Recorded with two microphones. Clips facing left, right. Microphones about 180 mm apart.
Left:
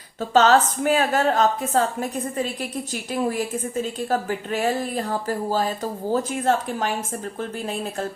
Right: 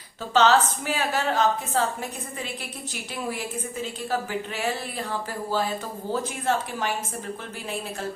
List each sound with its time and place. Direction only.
0.2 s speech: 45° left (ahead or behind)